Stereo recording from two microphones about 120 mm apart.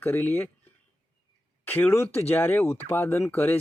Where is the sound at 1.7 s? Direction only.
15° left (ahead or behind).